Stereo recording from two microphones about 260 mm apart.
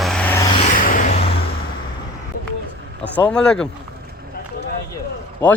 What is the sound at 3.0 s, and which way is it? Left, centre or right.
Speech, centre.